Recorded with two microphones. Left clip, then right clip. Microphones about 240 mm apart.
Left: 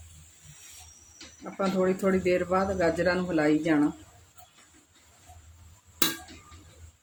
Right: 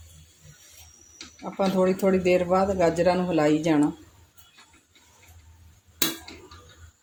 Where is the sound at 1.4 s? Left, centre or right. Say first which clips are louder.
Right 4 dB; centre.